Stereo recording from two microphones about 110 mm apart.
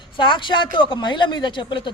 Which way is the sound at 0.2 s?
50° left (ahead or behind).